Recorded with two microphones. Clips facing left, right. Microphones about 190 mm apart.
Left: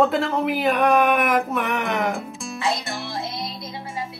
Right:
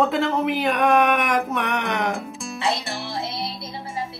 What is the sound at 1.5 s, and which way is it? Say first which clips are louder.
Music: left 1 dB; centre (ahead or behind).